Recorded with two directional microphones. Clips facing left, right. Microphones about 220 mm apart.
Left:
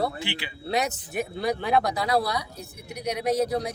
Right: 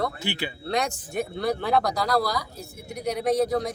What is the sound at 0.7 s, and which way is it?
Speech, 5° left (ahead or behind).